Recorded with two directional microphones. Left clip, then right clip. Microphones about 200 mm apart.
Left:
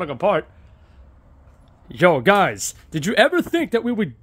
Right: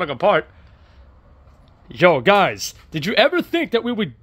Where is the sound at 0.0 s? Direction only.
15° left (ahead or behind).